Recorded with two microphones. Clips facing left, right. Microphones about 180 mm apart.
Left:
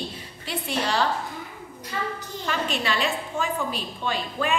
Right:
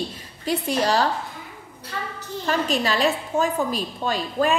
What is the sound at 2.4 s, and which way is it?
A woman's voice, 40° right (ahead or behind).